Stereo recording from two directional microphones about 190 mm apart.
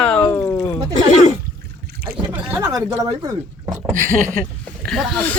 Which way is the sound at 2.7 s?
20° right (ahead or behind).